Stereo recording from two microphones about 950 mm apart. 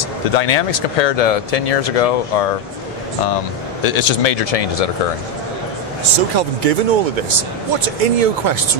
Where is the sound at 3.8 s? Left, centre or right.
Left.